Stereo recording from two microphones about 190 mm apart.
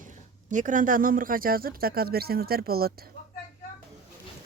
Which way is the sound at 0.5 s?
45° right (ahead or behind).